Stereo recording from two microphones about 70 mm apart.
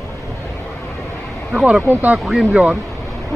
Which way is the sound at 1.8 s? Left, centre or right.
Right.